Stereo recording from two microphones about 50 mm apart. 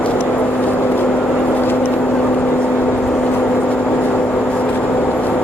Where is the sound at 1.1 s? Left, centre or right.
Left.